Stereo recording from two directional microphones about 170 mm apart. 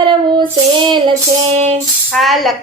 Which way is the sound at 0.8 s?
30° right (ahead or behind).